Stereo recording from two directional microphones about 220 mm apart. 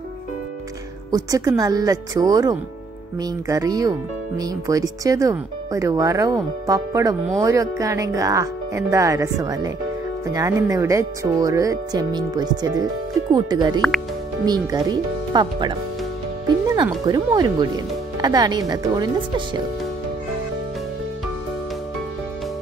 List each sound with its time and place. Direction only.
1.1 s speech: 15° right (ahead or behind)
13.7 s speech: centre (ahead or behind)
14.4 s speech: 15° right (ahead or behind)
16.4 s music: 20° right (ahead or behind)
17.0 s speech: 20° right (ahead or behind)